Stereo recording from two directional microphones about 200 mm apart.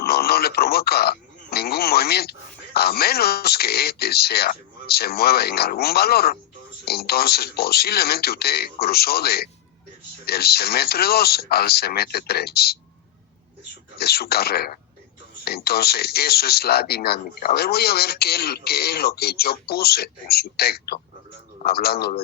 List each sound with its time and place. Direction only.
0.0 s a man's voice: 50° left (ahead or behind)
14.0 s speech: 50° left (ahead or behind)